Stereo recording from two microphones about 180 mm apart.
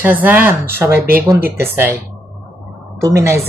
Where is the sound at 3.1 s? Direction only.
15° right (ahead or behind).